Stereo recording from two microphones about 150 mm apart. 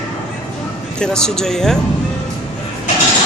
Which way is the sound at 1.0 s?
5° left (ahead or behind).